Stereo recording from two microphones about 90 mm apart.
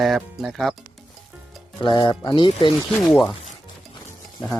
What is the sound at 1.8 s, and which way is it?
Speech, 55° left (ahead or behind).